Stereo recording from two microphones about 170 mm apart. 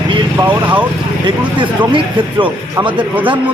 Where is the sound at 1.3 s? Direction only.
30° right (ahead or behind).